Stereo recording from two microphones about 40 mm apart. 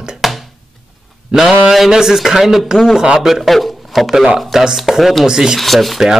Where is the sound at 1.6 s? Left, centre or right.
Centre.